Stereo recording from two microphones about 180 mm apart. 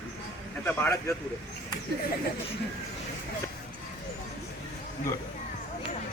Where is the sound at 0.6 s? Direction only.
15° left (ahead or behind).